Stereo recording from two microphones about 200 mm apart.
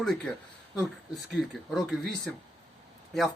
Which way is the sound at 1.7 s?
Centre (ahead or behind).